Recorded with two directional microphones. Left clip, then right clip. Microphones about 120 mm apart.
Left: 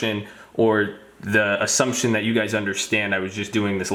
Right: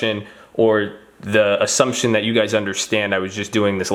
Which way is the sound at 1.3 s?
20° right (ahead or behind).